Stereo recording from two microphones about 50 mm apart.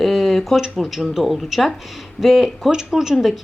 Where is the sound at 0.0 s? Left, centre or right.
Centre.